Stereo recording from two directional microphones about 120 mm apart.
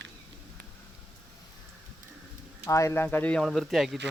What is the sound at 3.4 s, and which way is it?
Speech, centre (ahead or behind).